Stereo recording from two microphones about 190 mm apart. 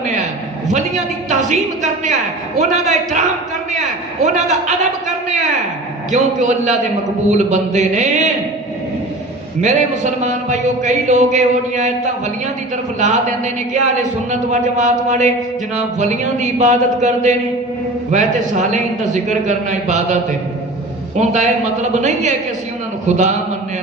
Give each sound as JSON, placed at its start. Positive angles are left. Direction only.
{"t": 0.0, "sound": "a sound", "side_deg": -40}
{"t": 1.3, "sound": "a man's voice", "side_deg": -40}
{"t": 3.7, "sound": "a sound", "side_deg": -40}
{"t": 6.1, "sound": "a man's voice", "side_deg": -40}
{"t": 9.6, "sound": "a man's voice", "side_deg": -40}
{"t": 21.2, "sound": "a man's voice", "side_deg": -40}